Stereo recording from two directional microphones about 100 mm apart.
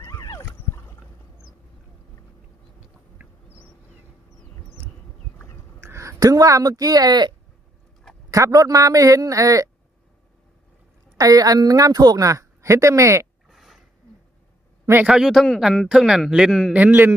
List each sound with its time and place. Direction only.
0.0 s a sound: 30° left (ahead or behind)
5.8 s speech: 30° right (ahead or behind); by 7.3 s 45° right (ahead or behind)
8.3 s speech: 35° right (ahead or behind)
11.2 s speech: 40° right (ahead or behind)
13.5 s a sound: 5° right (ahead or behind)
15.0 s a man's voice: 5° right (ahead or behind)
16.7 s a man's voice: 15° right (ahead or behind)